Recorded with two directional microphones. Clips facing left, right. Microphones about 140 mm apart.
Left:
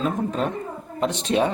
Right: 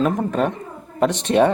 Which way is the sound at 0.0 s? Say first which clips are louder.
Right 4 dB; 60° right (ahead or behind).